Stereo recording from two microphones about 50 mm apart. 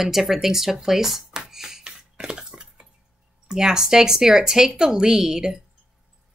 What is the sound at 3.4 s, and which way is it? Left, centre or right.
Speech, centre.